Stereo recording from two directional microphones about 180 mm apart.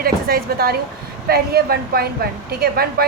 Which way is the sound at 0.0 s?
55° right (ahead or behind).